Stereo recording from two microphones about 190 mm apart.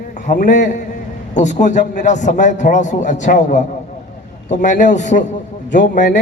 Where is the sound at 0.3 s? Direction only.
40° left (ahead or behind).